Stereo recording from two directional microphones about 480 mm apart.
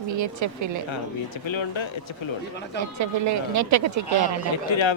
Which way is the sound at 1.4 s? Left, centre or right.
Left.